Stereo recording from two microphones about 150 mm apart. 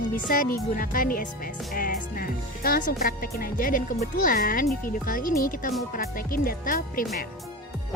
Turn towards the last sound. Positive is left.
turn(degrees=70)  # may be behind; listen again after turning